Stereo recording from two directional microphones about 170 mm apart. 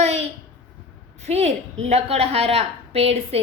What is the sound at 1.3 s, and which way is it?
A woman's voice, 40° right (ahead or behind).